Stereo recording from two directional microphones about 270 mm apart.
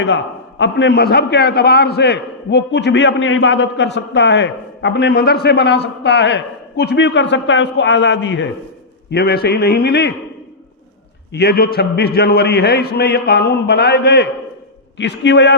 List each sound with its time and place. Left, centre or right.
0.6 s a man's voice: left
11.3 s a man's voice: left